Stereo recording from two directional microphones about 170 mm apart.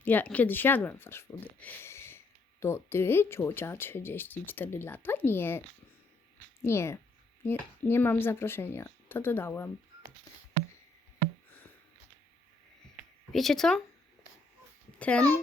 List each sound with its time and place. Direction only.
0.0 s speech: 10° left (ahead or behind)
13.3 s speech: centre (ahead or behind)
14.9 s a child's voice: 10° left (ahead or behind)